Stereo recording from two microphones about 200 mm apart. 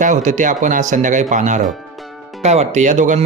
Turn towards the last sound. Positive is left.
turn(degrees=-35)  # may be behind; listen again after turning